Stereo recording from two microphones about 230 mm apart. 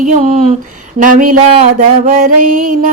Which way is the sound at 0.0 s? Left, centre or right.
Right.